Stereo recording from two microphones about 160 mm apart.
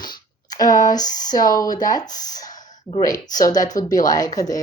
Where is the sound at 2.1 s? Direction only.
50° left (ahead or behind).